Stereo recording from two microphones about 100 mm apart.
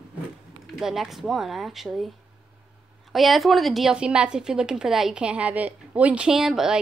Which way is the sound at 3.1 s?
Centre (ahead or behind).